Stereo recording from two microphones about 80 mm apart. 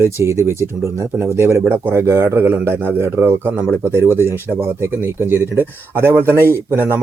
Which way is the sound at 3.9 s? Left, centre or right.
Left.